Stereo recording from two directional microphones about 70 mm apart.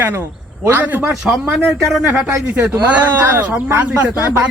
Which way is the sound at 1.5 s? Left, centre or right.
Centre.